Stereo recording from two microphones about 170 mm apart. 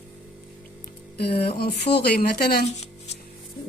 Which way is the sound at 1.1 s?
75° left (ahead or behind).